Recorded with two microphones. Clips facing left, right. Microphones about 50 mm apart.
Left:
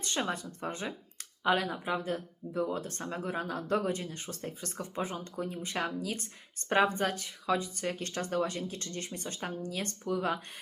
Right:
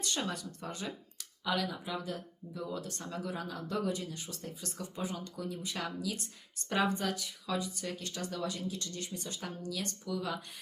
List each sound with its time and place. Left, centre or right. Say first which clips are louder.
0.0 s speech: left 3 dB; left